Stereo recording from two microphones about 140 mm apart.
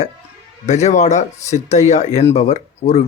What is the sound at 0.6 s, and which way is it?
Speech, 55° left (ahead or behind).